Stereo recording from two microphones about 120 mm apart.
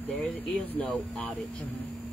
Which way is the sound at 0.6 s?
10° left (ahead or behind).